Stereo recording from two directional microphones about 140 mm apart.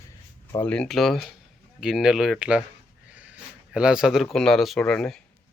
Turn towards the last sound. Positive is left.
turn(degrees=5)  # may be behind; listen again after turning